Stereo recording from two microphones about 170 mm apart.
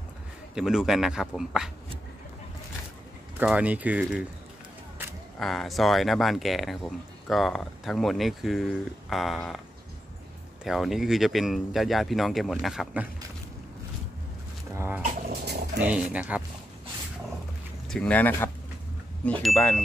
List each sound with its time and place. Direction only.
0.6 s speech: 5° right (ahead or behind)
3.3 s speech: 10° right (ahead or behind)
5.4 s speech: centre (ahead or behind)
10.6 s speech: centre (ahead or behind)
14.7 s speech: 15° right (ahead or behind)
15.4 s dog: 75° right (ahead or behind)
15.8 s speech: 10° right (ahead or behind)
17.8 s speech: 5° left (ahead or behind)